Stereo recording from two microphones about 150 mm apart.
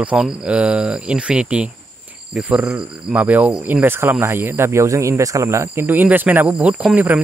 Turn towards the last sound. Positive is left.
turn(degrees=-10)  # may be behind; listen again after turning